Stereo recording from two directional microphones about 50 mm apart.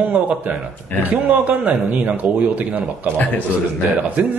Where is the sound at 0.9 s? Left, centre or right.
Left.